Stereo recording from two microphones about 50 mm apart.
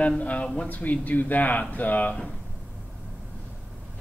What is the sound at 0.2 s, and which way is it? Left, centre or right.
Speech, left.